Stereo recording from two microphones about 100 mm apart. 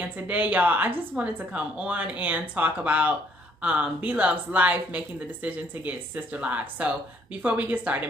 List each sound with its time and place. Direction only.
0.0 s a woman's voice: 15° right (ahead or behind)